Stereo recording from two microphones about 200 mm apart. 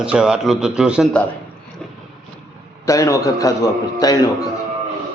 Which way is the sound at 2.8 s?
15° left (ahead or behind).